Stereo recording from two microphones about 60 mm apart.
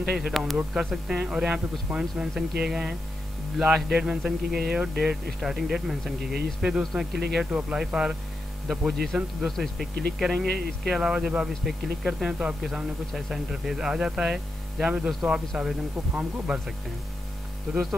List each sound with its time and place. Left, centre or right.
0.0 s speech: centre
1.2 s speech: centre